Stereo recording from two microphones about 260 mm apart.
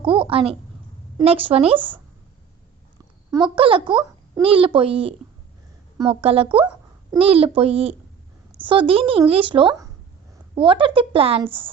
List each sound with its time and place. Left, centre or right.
0.0 s a child's voice: centre
3.3 s a child's voice: centre